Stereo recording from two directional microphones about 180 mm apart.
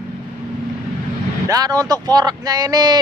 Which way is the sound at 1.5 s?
20° right (ahead or behind).